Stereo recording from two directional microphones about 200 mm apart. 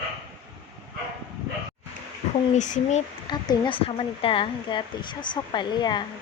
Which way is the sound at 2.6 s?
40° left (ahead or behind).